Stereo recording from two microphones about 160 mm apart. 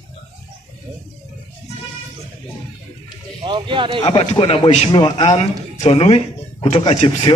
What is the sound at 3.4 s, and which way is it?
Speech, 30° right (ahead or behind).